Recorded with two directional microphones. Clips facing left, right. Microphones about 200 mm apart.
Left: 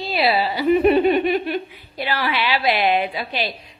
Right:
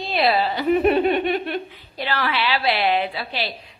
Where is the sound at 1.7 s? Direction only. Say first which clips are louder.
Left 1 dB; 10° left (ahead or behind).